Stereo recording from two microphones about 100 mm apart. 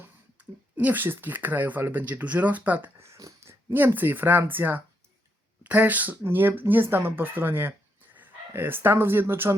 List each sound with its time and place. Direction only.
0.0 s speech: 15° right (ahead or behind)
3.0 s a sound: 30° right (ahead or behind)
3.7 s speech: 20° right (ahead or behind)